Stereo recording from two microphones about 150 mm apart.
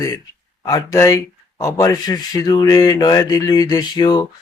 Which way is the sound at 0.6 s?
25° left (ahead or behind).